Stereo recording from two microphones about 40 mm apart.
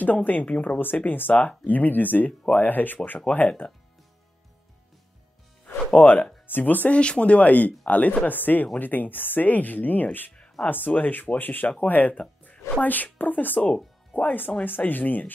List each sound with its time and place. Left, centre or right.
0.0 s speech: left
0.7 s speech: left
5.9 s speech: left
7.0 s speech: left
7.3 s speech: left
11.8 s music: left
12.8 s speech: left